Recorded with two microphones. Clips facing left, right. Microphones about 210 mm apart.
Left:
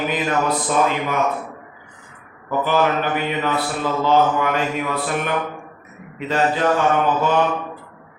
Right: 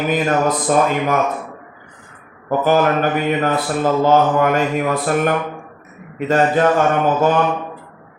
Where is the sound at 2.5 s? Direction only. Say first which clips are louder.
Right 4 dB; 45° right (ahead or behind).